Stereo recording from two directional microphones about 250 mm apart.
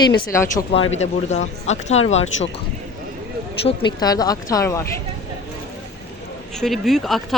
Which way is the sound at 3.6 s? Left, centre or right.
Centre.